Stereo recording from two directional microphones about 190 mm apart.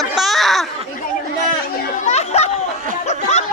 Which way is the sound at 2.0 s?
35° left (ahead or behind).